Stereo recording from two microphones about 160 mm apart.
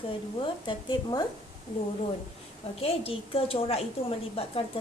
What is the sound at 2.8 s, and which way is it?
A woman's voice, 35° left (ahead or behind).